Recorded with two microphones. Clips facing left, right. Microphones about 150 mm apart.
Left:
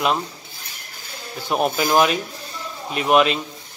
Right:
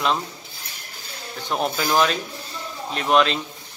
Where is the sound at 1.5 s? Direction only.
15° left (ahead or behind).